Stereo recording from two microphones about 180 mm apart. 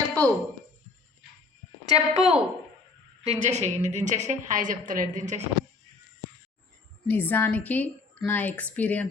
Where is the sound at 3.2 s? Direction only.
40° right (ahead or behind).